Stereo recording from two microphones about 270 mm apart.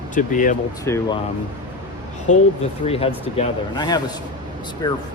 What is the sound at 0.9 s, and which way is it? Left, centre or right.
Speech, centre.